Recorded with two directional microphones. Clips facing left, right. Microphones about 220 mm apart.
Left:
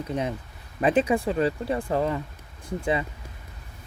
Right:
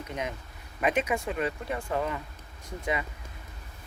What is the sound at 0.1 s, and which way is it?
Speech, 35° left (ahead or behind).